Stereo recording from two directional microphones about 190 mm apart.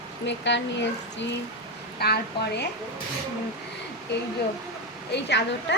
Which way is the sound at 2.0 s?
55° left (ahead or behind).